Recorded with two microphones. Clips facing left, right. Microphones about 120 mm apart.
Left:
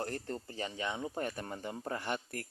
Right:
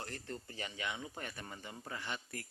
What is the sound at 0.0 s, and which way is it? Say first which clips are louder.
Speech: left 7 dB; 40° left (ahead or behind).